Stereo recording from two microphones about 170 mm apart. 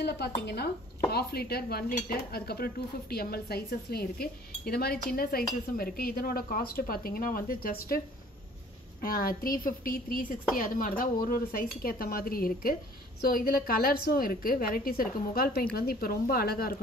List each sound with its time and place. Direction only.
0.0 s speech: 75° left (ahead or behind); by 8.0 s 60° left (ahead or behind)
9.0 s speech: 60° left (ahead or behind)